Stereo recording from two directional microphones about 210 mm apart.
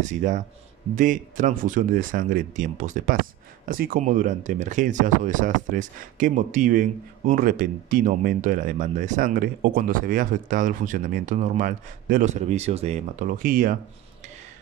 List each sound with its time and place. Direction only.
0.0 s speech: 35° right (ahead or behind)